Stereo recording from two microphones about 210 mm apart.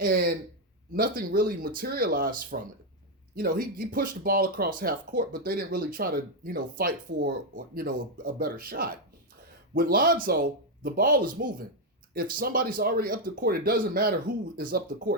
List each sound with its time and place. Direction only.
0.0 s speech: 45° right (ahead or behind)